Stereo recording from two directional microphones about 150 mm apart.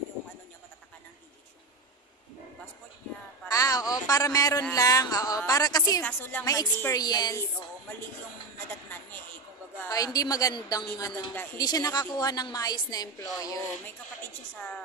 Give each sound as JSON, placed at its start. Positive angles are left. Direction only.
{"t": 3.4, "sound": "a man's voice", "side_deg": 20}
{"t": 6.0, "sound": "speech", "side_deg": 10}
{"t": 6.4, "sound": "a woman's voice", "side_deg": 25}
{"t": 9.8, "sound": "a woman's voice", "side_deg": 25}